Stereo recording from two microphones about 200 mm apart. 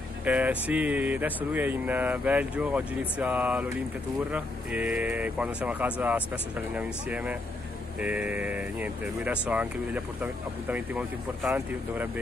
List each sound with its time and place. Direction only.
0.2 s speech: 5° right (ahead or behind)